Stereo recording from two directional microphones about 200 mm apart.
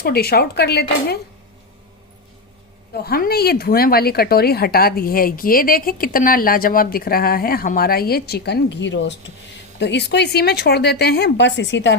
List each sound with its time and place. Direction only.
0.0 s speech: 50° left (ahead or behind)
2.9 s speech: 50° left (ahead or behind)